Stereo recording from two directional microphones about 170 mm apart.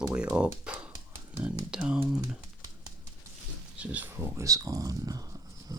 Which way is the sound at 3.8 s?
10° right (ahead or behind).